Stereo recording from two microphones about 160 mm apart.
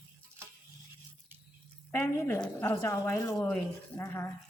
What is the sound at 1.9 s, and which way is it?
A woman's voice, 15° left (ahead or behind).